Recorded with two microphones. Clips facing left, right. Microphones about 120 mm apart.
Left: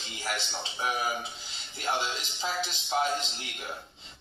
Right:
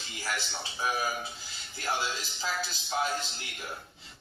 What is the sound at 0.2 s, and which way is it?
A man's voice, 20° left (ahead or behind).